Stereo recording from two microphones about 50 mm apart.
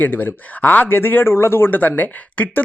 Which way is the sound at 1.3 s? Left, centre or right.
Left.